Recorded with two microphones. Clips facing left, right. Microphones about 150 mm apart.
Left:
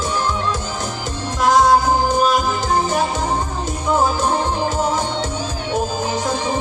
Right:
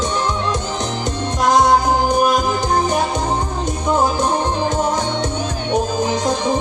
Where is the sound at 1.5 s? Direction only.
15° right (ahead or behind).